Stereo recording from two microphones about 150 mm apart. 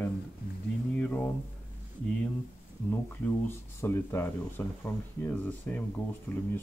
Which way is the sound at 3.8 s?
15° left (ahead or behind).